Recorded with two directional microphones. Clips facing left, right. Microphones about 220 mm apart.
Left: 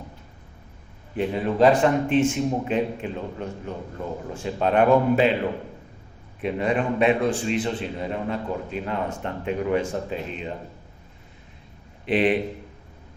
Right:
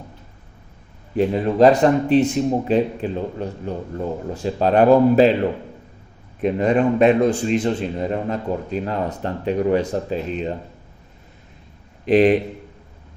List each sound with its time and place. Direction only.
1.1 s a man's voice: 40° right (ahead or behind)
6.4 s a man's voice: 40° right (ahead or behind)
12.0 s a man's voice: 40° right (ahead or behind)